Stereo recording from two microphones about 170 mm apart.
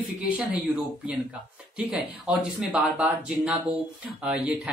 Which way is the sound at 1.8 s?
5° right (ahead or behind).